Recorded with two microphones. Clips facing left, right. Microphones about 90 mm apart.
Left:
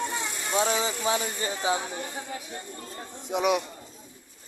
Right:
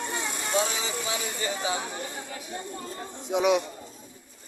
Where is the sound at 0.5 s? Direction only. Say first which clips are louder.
Left 3 dB; 35° left (ahead or behind).